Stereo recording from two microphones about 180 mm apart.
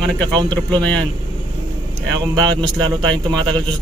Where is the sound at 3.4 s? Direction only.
25° right (ahead or behind).